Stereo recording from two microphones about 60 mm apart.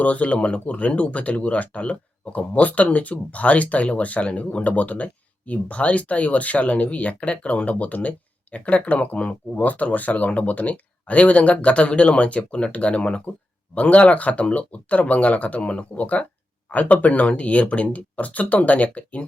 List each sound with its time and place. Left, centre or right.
0.0 s speech: left